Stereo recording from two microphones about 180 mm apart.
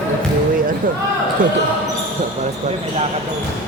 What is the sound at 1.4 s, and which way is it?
Speech, 50° right (ahead or behind).